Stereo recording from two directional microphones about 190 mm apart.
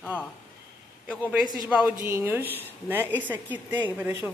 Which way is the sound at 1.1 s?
5° right (ahead or behind).